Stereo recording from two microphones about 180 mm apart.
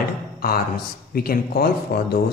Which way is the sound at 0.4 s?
55° left (ahead or behind).